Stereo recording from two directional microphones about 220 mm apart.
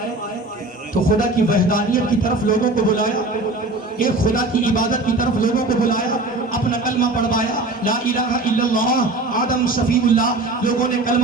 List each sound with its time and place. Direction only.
1.0 s a man's voice: 40° left (ahead or behind)